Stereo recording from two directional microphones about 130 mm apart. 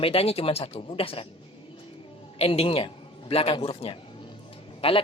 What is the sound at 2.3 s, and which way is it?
A man's voice, 50° left (ahead or behind).